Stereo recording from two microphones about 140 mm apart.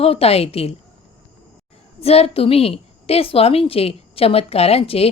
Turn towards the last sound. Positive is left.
turn(degrees=45)  # may be behind; listen again after turning